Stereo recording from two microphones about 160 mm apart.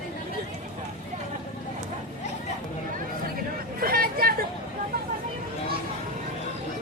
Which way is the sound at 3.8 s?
65° right (ahead or behind).